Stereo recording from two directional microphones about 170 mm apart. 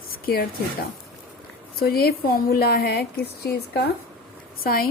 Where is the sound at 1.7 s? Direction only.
65° left (ahead or behind).